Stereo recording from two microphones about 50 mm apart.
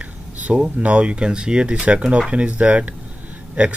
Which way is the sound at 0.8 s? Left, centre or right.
Right.